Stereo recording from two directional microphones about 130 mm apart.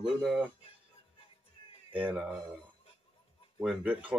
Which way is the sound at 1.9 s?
5° right (ahead or behind).